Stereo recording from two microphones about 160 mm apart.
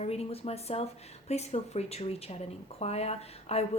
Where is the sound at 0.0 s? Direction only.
40° left (ahead or behind).